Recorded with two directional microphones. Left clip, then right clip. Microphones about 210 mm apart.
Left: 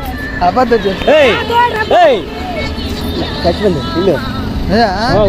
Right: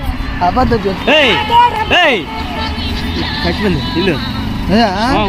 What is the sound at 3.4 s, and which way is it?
Speech, 20° right (ahead or behind).